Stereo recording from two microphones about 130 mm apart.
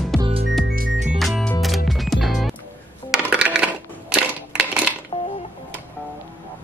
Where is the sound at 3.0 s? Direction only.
5° right (ahead or behind).